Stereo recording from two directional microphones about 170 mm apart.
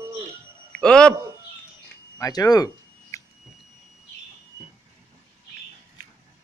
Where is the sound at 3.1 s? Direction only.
15° left (ahead or behind).